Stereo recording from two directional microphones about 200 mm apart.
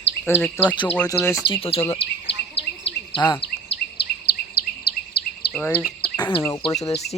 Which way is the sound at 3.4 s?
55° left (ahead or behind).